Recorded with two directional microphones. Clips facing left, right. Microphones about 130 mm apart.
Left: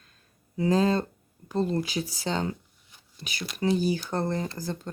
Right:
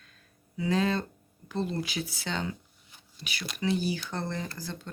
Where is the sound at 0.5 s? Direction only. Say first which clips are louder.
Left 4 dB; 40° left (ahead or behind).